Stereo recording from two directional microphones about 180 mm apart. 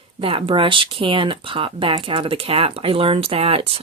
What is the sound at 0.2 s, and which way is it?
Speech, 30° right (ahead or behind).